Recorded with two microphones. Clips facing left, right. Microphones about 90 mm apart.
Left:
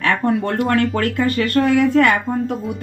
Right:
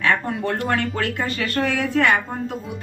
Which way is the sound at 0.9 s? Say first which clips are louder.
Left 6 dB; 65° left (ahead or behind).